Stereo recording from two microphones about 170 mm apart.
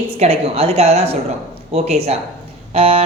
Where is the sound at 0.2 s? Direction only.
35° right (ahead or behind).